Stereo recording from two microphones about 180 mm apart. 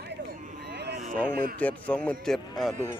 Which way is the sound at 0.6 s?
70° right (ahead or behind).